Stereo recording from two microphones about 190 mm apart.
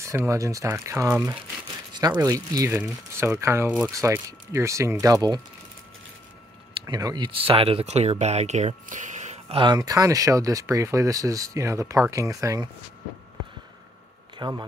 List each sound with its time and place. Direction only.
0.0 s speech: 15° right (ahead or behind)
2.0 s speech: 20° right (ahead or behind)
6.7 s speech: 20° right (ahead or behind)
14.4 s speech: 20° right (ahead or behind)